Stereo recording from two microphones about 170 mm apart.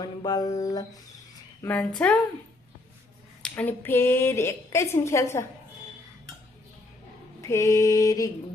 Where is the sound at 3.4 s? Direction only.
10° left (ahead or behind).